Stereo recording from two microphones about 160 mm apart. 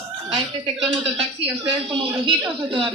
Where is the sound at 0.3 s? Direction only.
5° right (ahead or behind).